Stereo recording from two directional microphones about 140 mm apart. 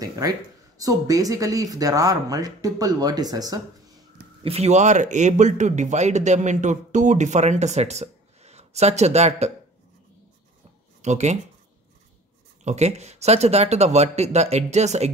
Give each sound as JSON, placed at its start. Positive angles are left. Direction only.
{"t": 0.0, "sound": "speech", "side_deg": -25}
{"t": 4.4, "sound": "a man's voice", "side_deg": -45}
{"t": 11.0, "sound": "speech", "side_deg": -55}
{"t": 12.6, "sound": "speech", "side_deg": -50}